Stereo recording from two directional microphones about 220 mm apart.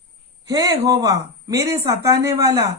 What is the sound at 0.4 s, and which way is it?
A man's voice, 15° right (ahead or behind).